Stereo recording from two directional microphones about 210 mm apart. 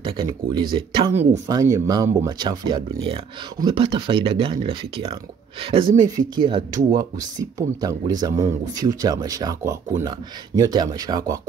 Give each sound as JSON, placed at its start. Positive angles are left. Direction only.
{"t": 0.0, "sound": "speech", "side_deg": -20}